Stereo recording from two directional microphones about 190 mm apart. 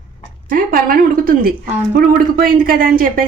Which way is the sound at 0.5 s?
45° right (ahead or behind).